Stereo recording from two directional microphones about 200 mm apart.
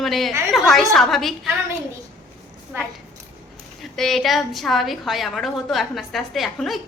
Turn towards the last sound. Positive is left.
turn(degrees=0)  # may be behind; listen again after turning